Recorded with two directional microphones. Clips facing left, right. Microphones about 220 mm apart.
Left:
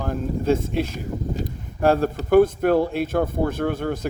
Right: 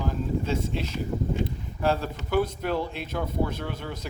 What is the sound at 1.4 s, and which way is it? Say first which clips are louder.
Speech: left 5 dB; 50° left (ahead or behind).